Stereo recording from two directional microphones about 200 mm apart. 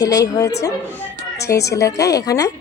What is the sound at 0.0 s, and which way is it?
A woman's voice, 15° left (ahead or behind).